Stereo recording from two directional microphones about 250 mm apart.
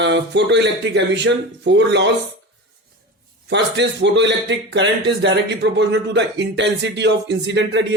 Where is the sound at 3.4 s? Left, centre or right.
Right.